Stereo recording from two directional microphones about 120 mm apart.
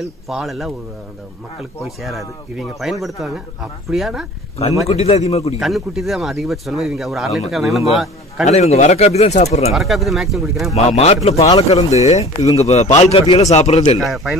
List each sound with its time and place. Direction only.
0.0 s speech: centre (ahead or behind)
4.8 s a man's voice: 60° left (ahead or behind)
5.6 s speech: centre (ahead or behind)
8.5 s a man's voice: 65° left (ahead or behind)
9.8 s speech: centre (ahead or behind)
10.7 s a man's voice: 60° left (ahead or behind)
13.9 s speech: centre (ahead or behind)